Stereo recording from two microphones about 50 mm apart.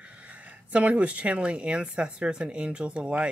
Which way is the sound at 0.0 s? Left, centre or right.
Right.